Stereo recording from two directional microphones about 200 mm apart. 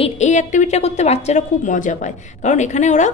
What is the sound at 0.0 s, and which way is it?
A woman's voice, 35° left (ahead or behind).